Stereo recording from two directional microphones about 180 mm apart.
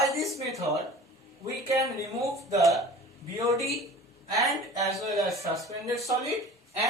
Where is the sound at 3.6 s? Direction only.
Centre (ahead or behind).